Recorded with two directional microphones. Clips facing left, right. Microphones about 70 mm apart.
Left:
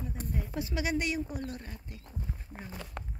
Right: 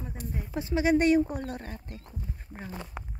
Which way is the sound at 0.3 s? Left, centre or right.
Centre.